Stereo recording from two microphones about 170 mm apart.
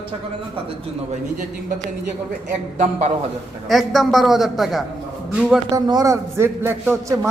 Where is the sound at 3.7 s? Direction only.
Centre (ahead or behind).